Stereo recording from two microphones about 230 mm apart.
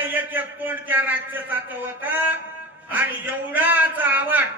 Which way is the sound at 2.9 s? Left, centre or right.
Centre.